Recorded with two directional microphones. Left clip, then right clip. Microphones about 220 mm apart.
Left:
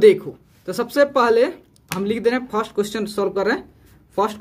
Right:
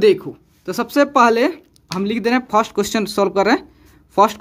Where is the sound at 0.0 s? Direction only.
25° right (ahead or behind).